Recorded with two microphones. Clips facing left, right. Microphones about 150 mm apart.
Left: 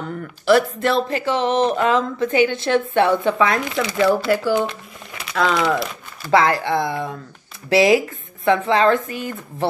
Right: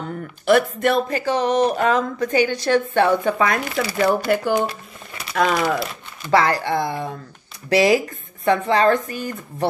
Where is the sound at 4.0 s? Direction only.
55° right (ahead or behind).